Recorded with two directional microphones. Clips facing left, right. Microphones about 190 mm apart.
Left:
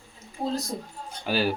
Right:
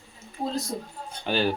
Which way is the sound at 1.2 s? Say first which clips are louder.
Even; 5° left (ahead or behind).